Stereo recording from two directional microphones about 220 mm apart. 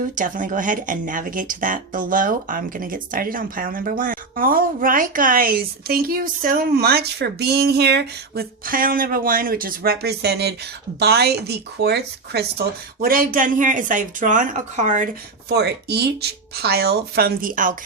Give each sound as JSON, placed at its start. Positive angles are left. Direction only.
{"t": 0.2, "sound": "speech", "side_deg": -35}